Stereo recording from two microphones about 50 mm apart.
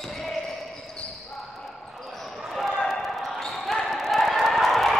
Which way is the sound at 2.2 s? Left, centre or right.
Centre.